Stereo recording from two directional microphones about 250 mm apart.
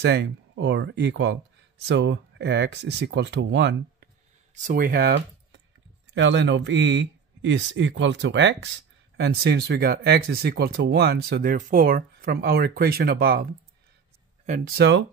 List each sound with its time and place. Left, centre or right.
0.0 s speech: right
4.6 s speech: right